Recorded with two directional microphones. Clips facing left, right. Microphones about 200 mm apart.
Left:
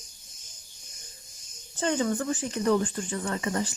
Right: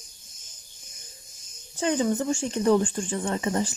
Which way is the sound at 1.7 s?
15° right (ahead or behind).